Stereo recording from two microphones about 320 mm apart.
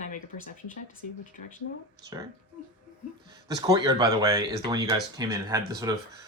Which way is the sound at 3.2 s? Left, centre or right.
Centre.